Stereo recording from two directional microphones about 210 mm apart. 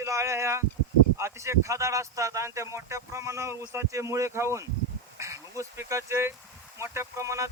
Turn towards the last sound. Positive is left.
turn(degrees=-15)  # may be behind; listen again after turning